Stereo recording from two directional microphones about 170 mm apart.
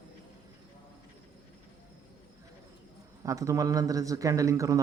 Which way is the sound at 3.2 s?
20° right (ahead or behind).